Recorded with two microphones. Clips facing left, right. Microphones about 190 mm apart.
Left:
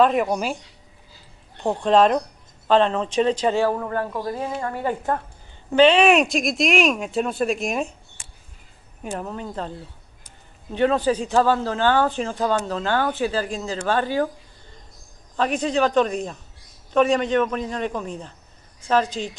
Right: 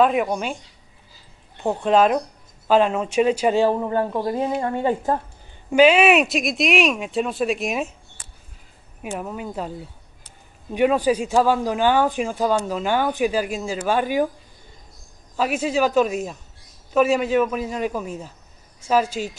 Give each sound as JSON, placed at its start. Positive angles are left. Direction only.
{"t": 0.0, "sound": "speech", "side_deg": 0}
{"t": 1.6, "sound": "speech", "side_deg": -5}
{"t": 5.7, "sound": "speech", "side_deg": -10}
{"t": 9.0, "sound": "speech", "side_deg": -10}
{"t": 15.3, "sound": "speech", "side_deg": -5}